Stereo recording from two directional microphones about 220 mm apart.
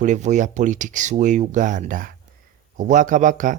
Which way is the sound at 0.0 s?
35° right (ahead or behind).